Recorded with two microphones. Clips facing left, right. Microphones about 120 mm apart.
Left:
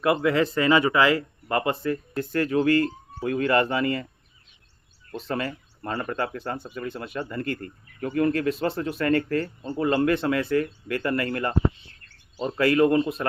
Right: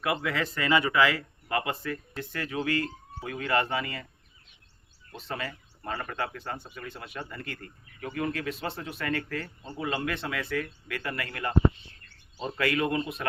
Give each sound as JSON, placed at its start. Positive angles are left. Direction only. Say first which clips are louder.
{"t": 0.0, "sound": "speech", "louder": "left 8 dB", "side_deg": 40}
{"t": 5.1, "sound": "speech", "louder": "left 7 dB", "side_deg": 45}
{"t": 10.2, "sound": "speech", "louder": "left 9 dB", "side_deg": 40}
{"t": 12.5, "sound": "speech", "louder": "left 8 dB", "side_deg": 35}